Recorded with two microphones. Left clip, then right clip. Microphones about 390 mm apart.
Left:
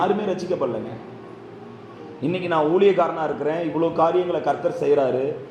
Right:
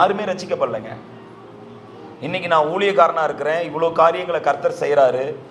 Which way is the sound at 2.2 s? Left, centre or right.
Right.